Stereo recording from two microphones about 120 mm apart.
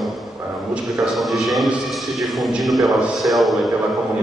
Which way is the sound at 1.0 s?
Centre (ahead or behind).